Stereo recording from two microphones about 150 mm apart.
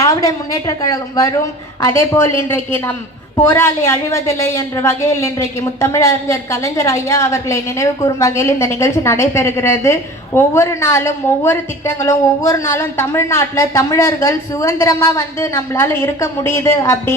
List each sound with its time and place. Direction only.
0.0 s a woman's voice: 20° left (ahead or behind)